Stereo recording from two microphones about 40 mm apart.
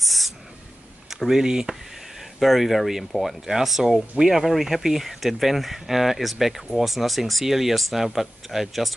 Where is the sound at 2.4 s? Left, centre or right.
Centre.